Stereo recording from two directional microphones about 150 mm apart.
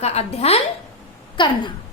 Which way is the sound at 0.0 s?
45° left (ahead or behind).